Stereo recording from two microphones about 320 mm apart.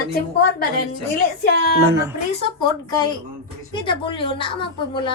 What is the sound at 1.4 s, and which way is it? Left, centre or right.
Speech, left.